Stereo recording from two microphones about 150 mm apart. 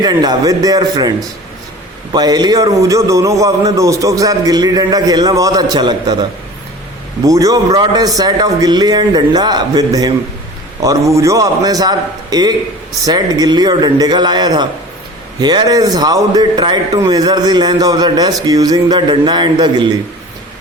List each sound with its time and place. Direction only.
0.0 s a man's voice: 25° right (ahead or behind)
2.1 s a man's voice: 25° right (ahead or behind)
7.3 s a man's voice: 25° right (ahead or behind)